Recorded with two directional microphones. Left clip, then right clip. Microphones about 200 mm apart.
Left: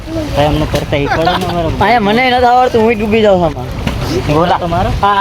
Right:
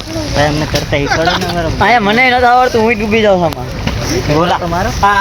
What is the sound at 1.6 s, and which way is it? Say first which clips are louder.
Speech: right 1 dB; 20° left (ahead or behind).